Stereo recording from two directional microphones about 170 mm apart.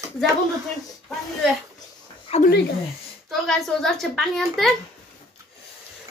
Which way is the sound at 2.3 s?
35° left (ahead or behind).